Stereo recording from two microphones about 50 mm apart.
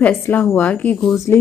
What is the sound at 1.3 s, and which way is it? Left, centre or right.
Speech, left.